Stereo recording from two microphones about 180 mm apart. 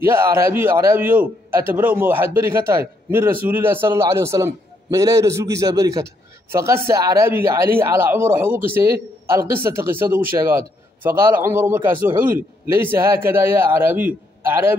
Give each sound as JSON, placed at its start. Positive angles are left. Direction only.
{"t": 0.0, "sound": "a man's voice", "side_deg": -15}